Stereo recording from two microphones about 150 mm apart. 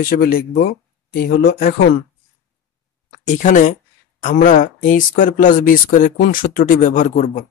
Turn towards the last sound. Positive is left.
turn(degrees=60)  # may be behind; listen again after turning